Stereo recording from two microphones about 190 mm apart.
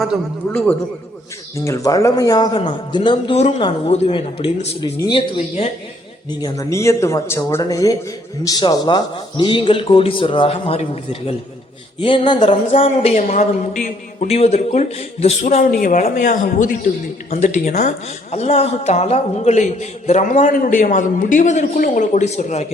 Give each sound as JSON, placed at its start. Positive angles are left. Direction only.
{"t": 0.5, "sound": "a man's voice", "side_deg": 10}
{"t": 6.4, "sound": "a man's voice", "side_deg": 15}